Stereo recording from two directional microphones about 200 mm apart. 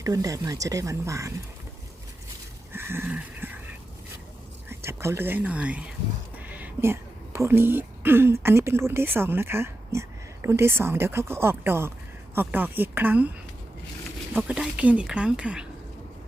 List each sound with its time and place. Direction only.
0.0 s a woman's voice: 15° right (ahead or behind)
2.7 s a sound: 10° right (ahead or behind)
4.7 s a woman's voice: 10° right (ahead or behind)
14.3 s speech: 5° right (ahead or behind)